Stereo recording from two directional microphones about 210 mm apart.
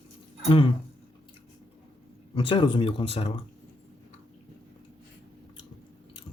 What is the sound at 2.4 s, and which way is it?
Speech, 25° left (ahead or behind).